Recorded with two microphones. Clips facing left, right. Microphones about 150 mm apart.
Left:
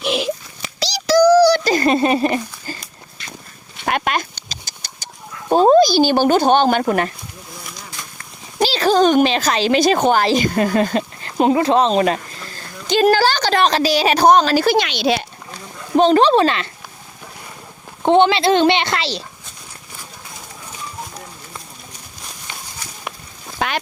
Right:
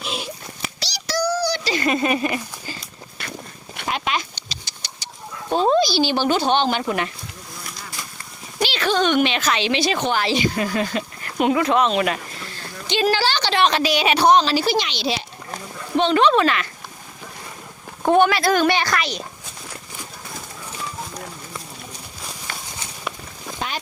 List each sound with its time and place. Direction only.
0.0 s a sound: 80° left
1.0 s child singing: 90° left
1.6 s speech: 40° left (ahead or behind)
3.8 s engine: 55° left (ahead or behind)
5.5 s speech: 45° left (ahead or behind)
7.6 s a sound: centre (ahead or behind)
8.6 s speech: 35° left (ahead or behind)
11.2 s speech: 30° left (ahead or behind); by 15.2 s 55° left (ahead or behind)
16.0 s speech: 40° left (ahead or behind)
18.0 s speech: 25° left (ahead or behind)
23.6 s a sound: 75° left (ahead or behind)